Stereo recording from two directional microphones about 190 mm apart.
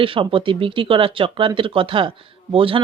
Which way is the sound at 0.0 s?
25° right (ahead or behind).